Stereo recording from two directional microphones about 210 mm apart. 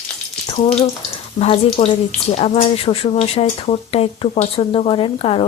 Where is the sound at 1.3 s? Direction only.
30° left (ahead or behind).